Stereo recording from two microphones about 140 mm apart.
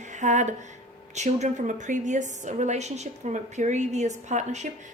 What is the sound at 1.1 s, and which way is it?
A woman's voice, 55° right (ahead or behind).